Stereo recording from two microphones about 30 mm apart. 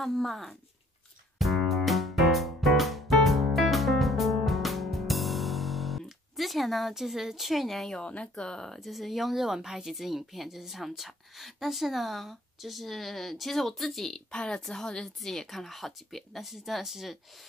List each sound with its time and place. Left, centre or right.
0.0 s speech: centre
1.4 s music: centre
6.9 s speech: centre
8.4 s a woman's voice: left
8.7 s a woman's voice: centre
9.9 s speech: centre
14.3 s a woman's voice: left
14.6 s a woman's voice: centre
15.2 s speech: centre
16.3 s a woman's voice: centre